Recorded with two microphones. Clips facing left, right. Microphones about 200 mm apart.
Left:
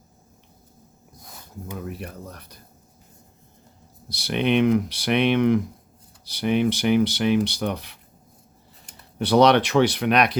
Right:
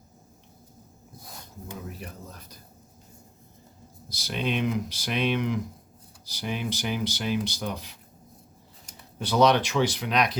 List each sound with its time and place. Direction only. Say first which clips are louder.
1.7 s speech: left 6 dB; 65° left (ahead or behind)
4.1 s speech: left 8 dB; 65° left (ahead or behind)
9.1 s speech: left 5 dB; 65° left (ahead or behind)